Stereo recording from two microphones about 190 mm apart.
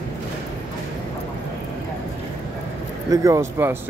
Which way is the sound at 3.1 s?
15° right (ahead or behind).